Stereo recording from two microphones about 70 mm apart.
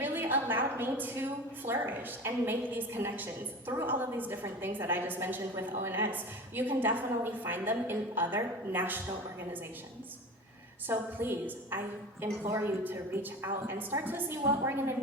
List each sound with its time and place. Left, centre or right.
0.0 s a woman's voice: right
10.8 s a woman's voice: right